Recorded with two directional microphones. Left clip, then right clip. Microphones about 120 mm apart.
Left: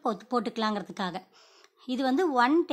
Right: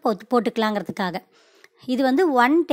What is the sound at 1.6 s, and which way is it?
Speech, 40° right (ahead or behind).